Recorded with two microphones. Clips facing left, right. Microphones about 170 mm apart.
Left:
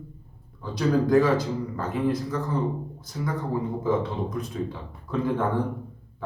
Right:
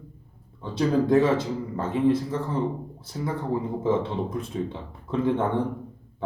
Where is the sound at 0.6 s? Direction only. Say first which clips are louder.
Even; 25° right (ahead or behind).